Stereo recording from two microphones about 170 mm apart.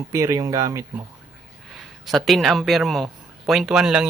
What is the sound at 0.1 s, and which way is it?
Speech, 20° right (ahead or behind).